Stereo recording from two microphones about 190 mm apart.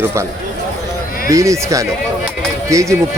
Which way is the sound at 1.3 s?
15° right (ahead or behind).